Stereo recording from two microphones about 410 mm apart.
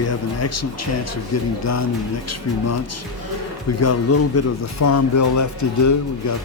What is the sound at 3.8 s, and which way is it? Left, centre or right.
Speech, left.